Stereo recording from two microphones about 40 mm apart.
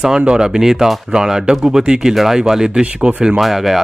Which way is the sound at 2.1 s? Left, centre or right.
Centre.